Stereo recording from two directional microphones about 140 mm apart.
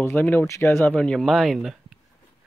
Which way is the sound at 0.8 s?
5° left (ahead or behind).